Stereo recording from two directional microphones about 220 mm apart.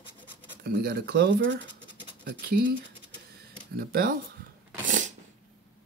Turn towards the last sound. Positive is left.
turn(degrees=-35)  # may be behind; listen again after turning